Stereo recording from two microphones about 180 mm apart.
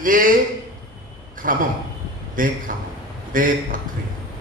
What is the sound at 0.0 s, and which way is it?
Speech, 50° right (ahead or behind).